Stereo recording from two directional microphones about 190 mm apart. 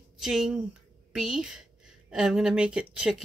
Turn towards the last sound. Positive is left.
turn(degrees=-5)  # may be behind; listen again after turning